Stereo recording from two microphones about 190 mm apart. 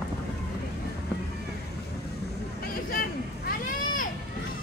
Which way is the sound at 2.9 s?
50° left (ahead or behind).